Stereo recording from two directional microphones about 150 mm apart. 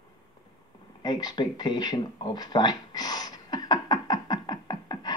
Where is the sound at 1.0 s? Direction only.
25° left (ahead or behind).